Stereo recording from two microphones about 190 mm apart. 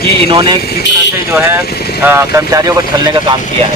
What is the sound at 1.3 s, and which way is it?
Speech, 10° right (ahead or behind).